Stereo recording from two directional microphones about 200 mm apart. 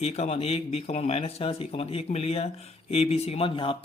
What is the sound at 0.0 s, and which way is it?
Speech, 30° left (ahead or behind).